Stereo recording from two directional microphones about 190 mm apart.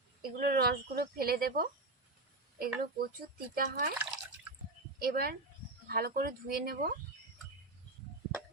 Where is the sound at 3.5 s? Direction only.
45° right (ahead or behind).